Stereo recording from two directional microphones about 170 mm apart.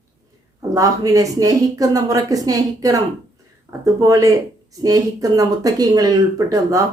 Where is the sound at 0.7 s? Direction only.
20° right (ahead or behind).